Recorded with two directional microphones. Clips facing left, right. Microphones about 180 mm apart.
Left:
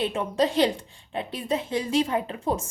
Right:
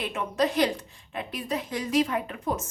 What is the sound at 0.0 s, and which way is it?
A woman's voice, 30° left (ahead or behind).